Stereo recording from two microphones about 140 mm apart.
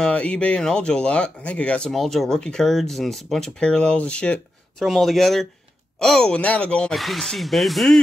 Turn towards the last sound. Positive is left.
turn(degrees=0)  # may be behind; listen again after turning